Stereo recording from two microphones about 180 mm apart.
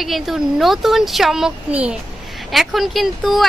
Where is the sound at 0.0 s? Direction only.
Centre (ahead or behind).